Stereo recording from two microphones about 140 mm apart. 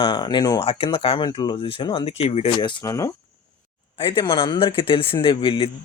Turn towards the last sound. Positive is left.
turn(degrees=35)  # may be behind; listen again after turning